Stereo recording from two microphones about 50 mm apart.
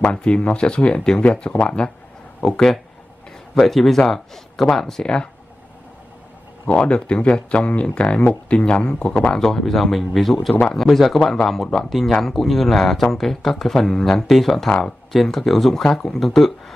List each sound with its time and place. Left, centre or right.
0.0 s speech: left
2.4 s speech: centre
6.7 s speech: left
10.9 s speech: centre